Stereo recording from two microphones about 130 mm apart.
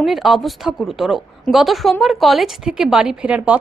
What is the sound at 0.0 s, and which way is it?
A woman's voice, centre (ahead or behind).